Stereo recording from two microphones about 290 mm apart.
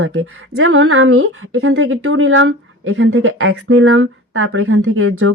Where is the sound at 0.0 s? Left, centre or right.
Right.